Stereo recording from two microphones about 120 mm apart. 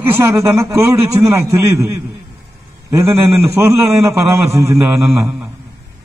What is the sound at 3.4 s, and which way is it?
A man's voice, 25° right (ahead or behind).